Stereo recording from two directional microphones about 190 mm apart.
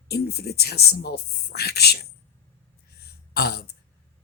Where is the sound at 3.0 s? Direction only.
55° left (ahead or behind).